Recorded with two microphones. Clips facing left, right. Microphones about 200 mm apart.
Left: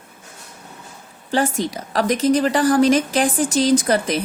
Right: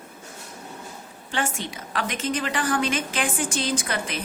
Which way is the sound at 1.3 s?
40° left (ahead or behind).